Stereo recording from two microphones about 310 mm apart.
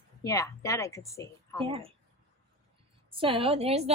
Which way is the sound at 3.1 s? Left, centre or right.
Centre.